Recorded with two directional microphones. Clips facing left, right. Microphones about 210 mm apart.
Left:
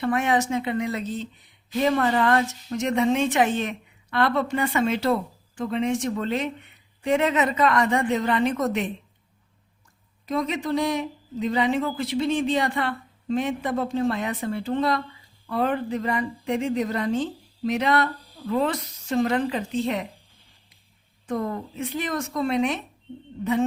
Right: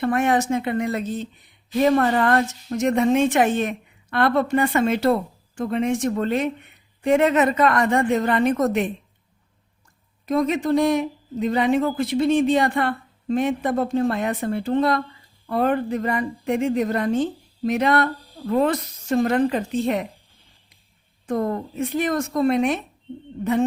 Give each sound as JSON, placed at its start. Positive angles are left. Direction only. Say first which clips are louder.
{"t": 0.0, "sound": "speech", "louder": "right 3 dB", "side_deg": -50}
{"t": 10.2, "sound": "speech", "louder": "right 5 dB", "side_deg": -50}
{"t": 21.2, "sound": "speech", "louder": "right 4 dB", "side_deg": -45}